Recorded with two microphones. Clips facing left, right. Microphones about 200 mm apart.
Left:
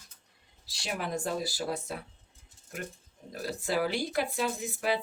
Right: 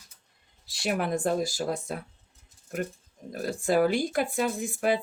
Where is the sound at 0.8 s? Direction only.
55° right (ahead or behind).